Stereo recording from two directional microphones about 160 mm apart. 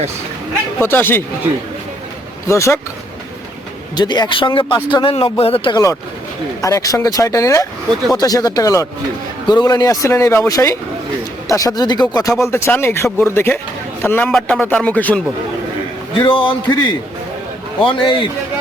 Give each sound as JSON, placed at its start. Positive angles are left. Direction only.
{"t": 0.8, "sound": "speech", "side_deg": 15}
{"t": 2.5, "sound": "speech", "side_deg": 20}
{"t": 3.9, "sound": "speech", "side_deg": 25}
{"t": 5.7, "sound": "a man's voice", "side_deg": 20}
{"t": 16.2, "sound": "speech", "side_deg": 30}